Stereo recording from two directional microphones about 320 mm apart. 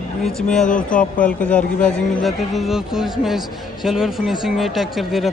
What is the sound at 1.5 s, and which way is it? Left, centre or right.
Speech, centre.